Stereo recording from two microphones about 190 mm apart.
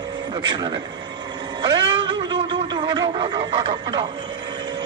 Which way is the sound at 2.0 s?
25° right (ahead or behind).